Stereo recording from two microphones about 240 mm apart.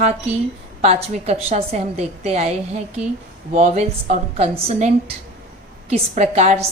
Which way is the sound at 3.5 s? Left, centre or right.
Right.